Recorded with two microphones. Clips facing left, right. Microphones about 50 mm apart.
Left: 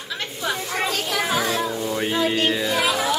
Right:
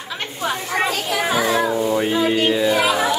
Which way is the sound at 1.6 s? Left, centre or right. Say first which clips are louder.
Right 6 dB; right.